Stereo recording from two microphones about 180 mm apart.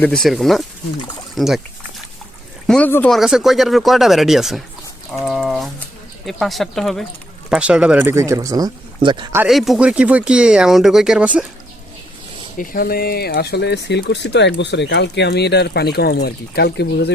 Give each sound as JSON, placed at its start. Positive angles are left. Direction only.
{"t": 0.0, "sound": "speech", "side_deg": 5}
{"t": 2.6, "sound": "speech", "side_deg": 5}
{"t": 9.5, "sound": "speech", "side_deg": 0}
{"t": 12.5, "sound": "speech", "side_deg": 50}